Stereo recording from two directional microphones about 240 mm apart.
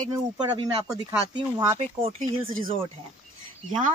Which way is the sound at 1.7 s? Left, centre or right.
Right.